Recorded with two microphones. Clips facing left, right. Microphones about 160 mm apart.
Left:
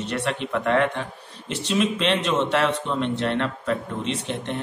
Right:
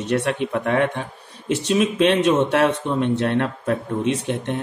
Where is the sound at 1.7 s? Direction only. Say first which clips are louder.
Right 4 dB; 55° right (ahead or behind).